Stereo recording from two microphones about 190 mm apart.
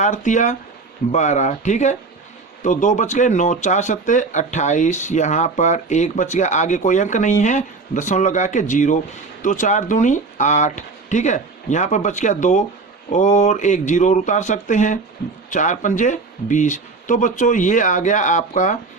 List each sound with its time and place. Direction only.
0.0 s speech: 40° left (ahead or behind)